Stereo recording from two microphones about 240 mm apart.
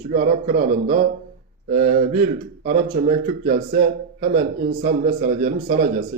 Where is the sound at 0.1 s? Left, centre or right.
Right.